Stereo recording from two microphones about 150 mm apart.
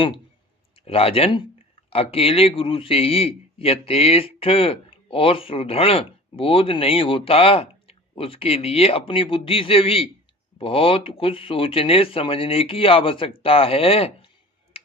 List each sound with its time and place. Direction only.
0.9 s a man's voice: 40° left (ahead or behind)